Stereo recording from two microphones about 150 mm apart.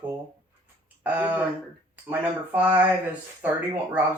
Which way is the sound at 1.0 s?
10° right (ahead or behind).